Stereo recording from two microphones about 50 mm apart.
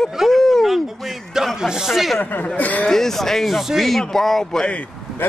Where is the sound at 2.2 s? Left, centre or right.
Left.